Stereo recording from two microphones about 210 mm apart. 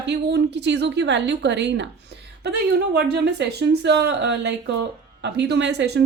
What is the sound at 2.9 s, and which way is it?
A woman's voice, 50° right (ahead or behind).